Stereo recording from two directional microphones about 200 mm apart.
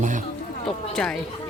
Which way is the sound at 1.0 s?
5° left (ahead or behind).